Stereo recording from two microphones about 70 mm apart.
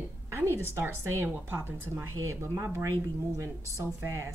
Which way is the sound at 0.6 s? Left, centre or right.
Right.